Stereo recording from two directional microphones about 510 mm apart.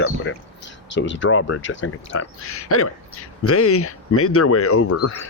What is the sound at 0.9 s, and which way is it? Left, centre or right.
Speech, left.